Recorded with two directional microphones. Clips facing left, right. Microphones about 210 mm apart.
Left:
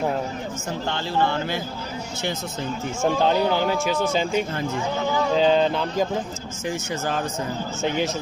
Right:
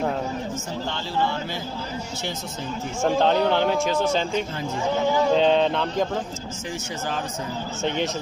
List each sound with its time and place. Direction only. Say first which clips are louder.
0.9 s speech: left 3 dB; 55° left (ahead or behind)
3.0 s speech: right 1 dB; 5° left (ahead or behind)
7.9 s speech: left 1 dB; 5° left (ahead or behind)